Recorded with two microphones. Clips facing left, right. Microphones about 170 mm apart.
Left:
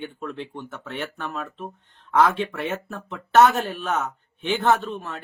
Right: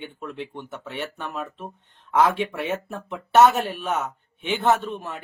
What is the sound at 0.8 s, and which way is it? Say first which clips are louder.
A man's voice: left 1 dB; 5° right (ahead or behind).